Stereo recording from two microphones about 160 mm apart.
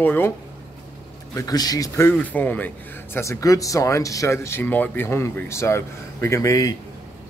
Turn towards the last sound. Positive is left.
turn(degrees=20)  # may be behind; listen again after turning